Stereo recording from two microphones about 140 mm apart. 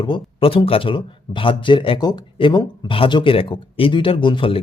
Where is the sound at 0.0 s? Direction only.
40° left (ahead or behind).